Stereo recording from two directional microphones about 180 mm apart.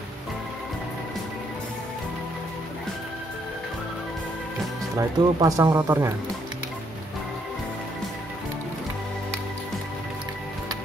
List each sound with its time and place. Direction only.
4.9 s speech: 20° right (ahead or behind)